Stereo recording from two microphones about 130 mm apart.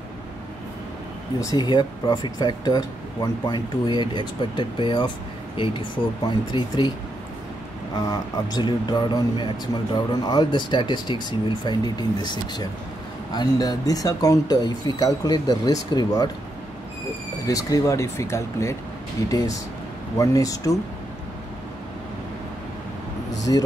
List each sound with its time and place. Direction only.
1.4 s speech: 30° left (ahead or behind)
7.9 s speech: 30° left (ahead or behind)
17.5 s speech: 25° left (ahead or behind)
23.3 s a sound: 30° left (ahead or behind)